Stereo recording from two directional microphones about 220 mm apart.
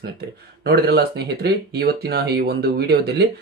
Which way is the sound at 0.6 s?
45° right (ahead or behind).